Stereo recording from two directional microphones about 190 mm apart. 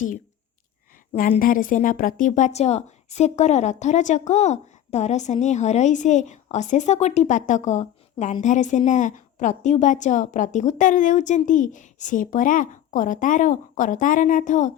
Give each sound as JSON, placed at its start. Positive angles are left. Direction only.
{"t": 1.4, "sound": "a woman's voice", "side_deg": 45}